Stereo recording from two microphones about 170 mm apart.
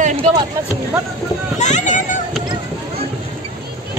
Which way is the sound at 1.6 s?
45° left (ahead or behind).